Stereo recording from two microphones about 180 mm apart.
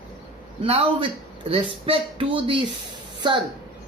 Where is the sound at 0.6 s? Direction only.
30° right (ahead or behind).